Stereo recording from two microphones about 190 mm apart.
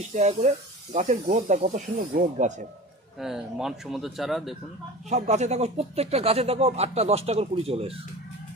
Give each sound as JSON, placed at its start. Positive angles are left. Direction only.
{"t": 0.1, "sound": "speech", "side_deg": -40}
{"t": 3.2, "sound": "speech", "side_deg": 0}
{"t": 5.0, "sound": "speech", "side_deg": -35}